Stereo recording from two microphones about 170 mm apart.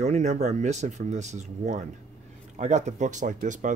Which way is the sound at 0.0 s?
40° right (ahead or behind).